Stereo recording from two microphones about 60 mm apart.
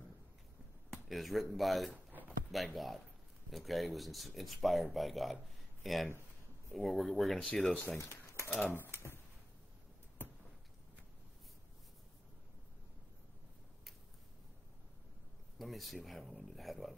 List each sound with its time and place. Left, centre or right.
0.9 s speech: centre
8.0 s a sound: left
8.7 s speech: left
15.6 s speech: centre